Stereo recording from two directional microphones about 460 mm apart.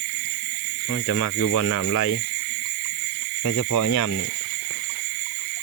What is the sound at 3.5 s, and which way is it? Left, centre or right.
Speech, left.